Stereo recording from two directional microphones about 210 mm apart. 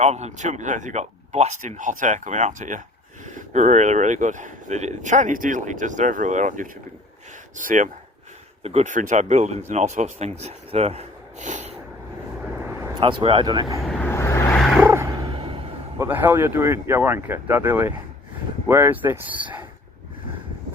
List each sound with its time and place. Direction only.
0.0 s speech: 30° right (ahead or behind)
12.5 s vehicle: 10° right (ahead or behind)
13.8 s vehicle: centre (ahead or behind)
14.1 s vehicle: 15° left (ahead or behind)
14.6 s dog: 10° right (ahead or behind); by 15.7 s 25° right (ahead or behind)
16.0 s speech: 10° right (ahead or behind)